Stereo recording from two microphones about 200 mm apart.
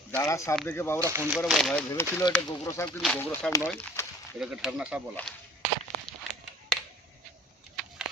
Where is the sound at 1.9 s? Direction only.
15° left (ahead or behind); by 5.0 s 5° right (ahead or behind).